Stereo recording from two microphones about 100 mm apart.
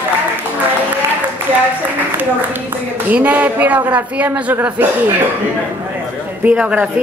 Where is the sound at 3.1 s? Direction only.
15° right (ahead or behind).